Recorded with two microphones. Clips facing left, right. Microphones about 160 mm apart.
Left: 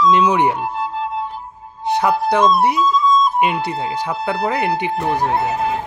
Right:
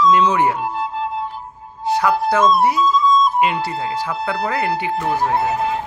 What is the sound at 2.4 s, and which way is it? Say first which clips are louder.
Speech: even; centre (ahead or behind).